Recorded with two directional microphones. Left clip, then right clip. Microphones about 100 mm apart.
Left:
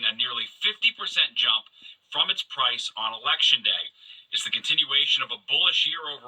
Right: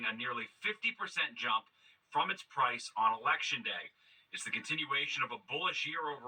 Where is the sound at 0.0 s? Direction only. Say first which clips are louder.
Left 11 dB; 20° left (ahead or behind).